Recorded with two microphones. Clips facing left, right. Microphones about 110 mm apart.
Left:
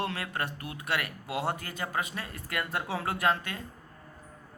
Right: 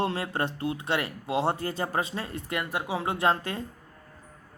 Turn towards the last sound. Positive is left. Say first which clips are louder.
# right 3 dB
turn(degrees=-30)  # may be behind; listen again after turning